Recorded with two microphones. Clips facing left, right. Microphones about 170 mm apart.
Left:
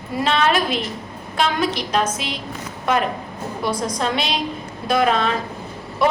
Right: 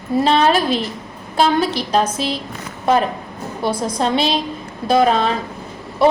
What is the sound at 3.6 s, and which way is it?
A woman's voice, 30° right (ahead or behind).